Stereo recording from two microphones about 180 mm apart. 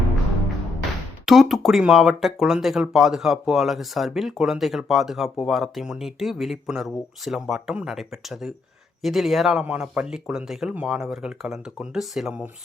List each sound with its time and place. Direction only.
1.2 s speech: centre (ahead or behind)